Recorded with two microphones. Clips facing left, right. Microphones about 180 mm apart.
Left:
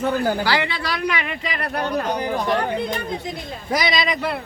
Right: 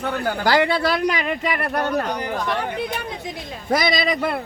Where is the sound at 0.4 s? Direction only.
50° right (ahead or behind).